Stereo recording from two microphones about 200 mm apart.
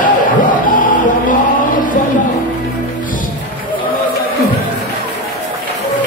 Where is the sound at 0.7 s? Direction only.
40° left (ahead or behind).